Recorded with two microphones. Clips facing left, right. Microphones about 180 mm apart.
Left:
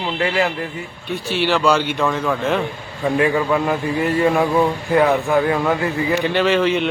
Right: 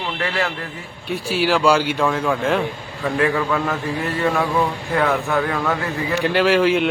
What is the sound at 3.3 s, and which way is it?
Speech, 15° left (ahead or behind).